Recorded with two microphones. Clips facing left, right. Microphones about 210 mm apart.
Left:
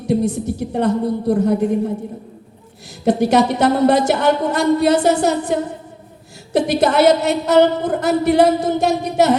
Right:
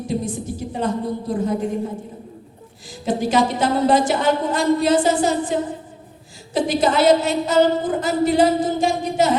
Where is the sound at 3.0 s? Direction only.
65° left (ahead or behind).